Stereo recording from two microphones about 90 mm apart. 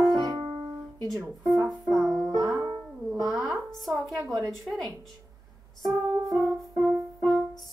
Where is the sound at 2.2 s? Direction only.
35° right (ahead or behind).